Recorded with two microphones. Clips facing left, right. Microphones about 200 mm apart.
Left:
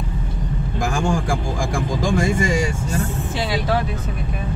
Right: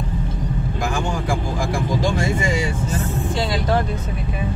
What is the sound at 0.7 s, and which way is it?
Speech, 45° left (ahead or behind).